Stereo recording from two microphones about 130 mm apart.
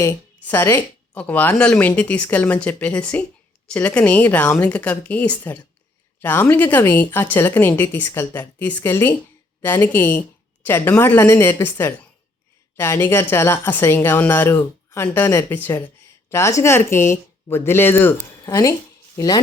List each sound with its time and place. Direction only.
0.0 s speech: 15° left (ahead or behind)